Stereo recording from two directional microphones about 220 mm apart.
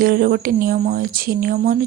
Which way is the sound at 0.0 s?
40° right (ahead or behind).